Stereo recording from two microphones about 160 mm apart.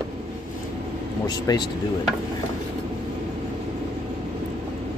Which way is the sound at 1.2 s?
25° left (ahead or behind).